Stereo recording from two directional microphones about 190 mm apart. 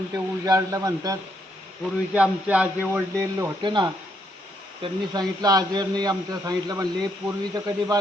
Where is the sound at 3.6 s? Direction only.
25° right (ahead or behind).